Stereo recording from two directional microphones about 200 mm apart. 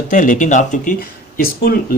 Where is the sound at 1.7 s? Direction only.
50° left (ahead or behind).